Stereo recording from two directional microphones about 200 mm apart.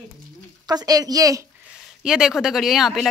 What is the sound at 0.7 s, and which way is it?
Speech, 20° right (ahead or behind).